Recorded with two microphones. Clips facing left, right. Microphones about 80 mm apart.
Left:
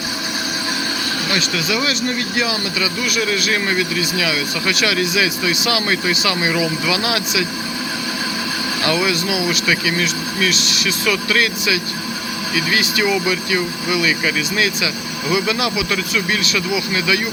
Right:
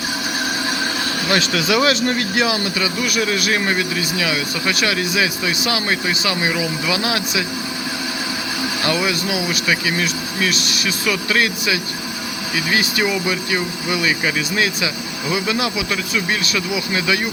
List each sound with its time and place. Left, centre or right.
1.5 s speech: right
2.7 s speech: right
8.8 s speech: right
15.9 s speech: right